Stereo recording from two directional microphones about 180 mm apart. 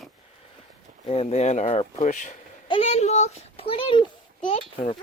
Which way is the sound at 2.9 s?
40° left (ahead or behind).